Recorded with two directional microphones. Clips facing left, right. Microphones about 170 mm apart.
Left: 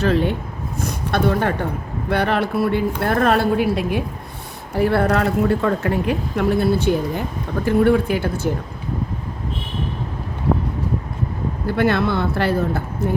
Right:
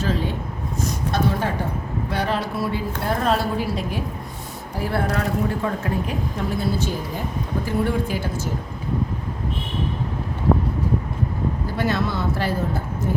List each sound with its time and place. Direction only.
0.0 s a woman's voice: 65° left (ahead or behind)
11.8 s speech: 60° left (ahead or behind)